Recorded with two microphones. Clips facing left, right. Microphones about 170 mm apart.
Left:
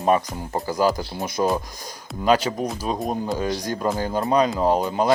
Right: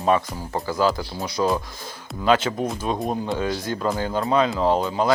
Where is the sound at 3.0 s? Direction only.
Centre (ahead or behind).